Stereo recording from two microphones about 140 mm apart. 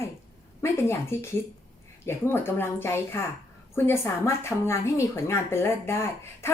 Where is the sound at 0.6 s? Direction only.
20° left (ahead or behind).